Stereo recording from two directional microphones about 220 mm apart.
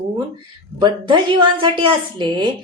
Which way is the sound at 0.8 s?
20° right (ahead or behind).